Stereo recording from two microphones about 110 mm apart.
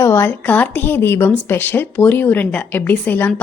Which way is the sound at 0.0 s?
25° left (ahead or behind).